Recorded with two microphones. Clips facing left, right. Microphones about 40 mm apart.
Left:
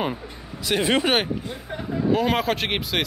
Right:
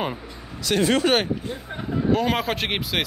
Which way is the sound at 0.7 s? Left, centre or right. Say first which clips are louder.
Right 1 dB; centre.